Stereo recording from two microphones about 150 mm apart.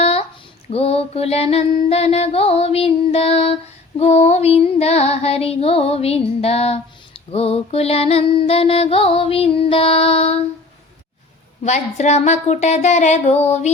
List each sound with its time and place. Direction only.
0.7 s mantra: 40° left (ahead or behind)
11.6 s speech: 50° left (ahead or behind)